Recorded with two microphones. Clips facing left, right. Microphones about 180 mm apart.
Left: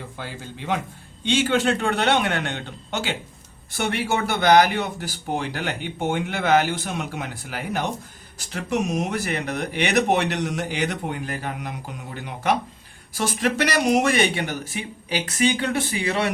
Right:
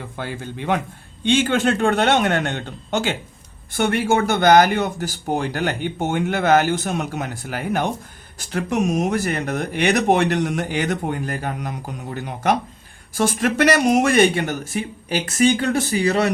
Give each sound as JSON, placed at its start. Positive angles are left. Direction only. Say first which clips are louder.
{"t": 0.2, "sound": "a man's voice", "louder": "right 8 dB", "side_deg": -55}